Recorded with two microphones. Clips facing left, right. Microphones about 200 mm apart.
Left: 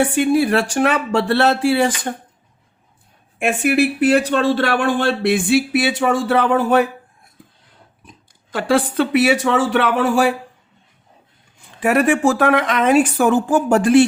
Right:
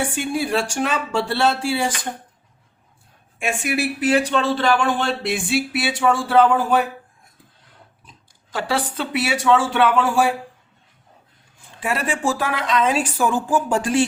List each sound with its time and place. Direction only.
0.0 s a woman's voice: 60° left (ahead or behind)
3.3 s a woman's voice: 60° left (ahead or behind)
8.5 s a woman's voice: 55° left (ahead or behind)
11.8 s a woman's voice: 65° left (ahead or behind)